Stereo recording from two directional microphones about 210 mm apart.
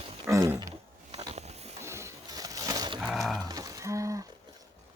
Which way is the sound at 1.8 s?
15° right (ahead or behind).